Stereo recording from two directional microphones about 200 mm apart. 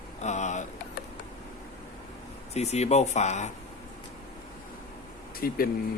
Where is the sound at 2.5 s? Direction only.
35° left (ahead or behind).